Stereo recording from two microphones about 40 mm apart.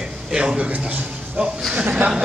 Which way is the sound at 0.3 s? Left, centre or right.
Right.